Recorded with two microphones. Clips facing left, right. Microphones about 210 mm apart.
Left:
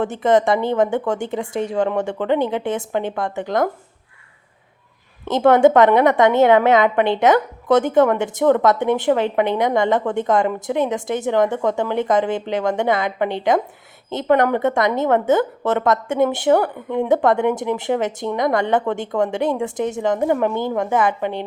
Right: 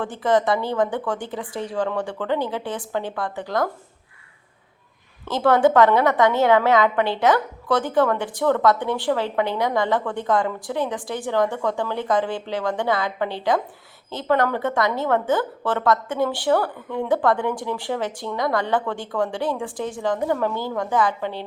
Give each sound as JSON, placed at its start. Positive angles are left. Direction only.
{"t": 0.0, "sound": "a woman's voice", "side_deg": 25}
{"t": 5.2, "sound": "a woman's voice", "side_deg": 20}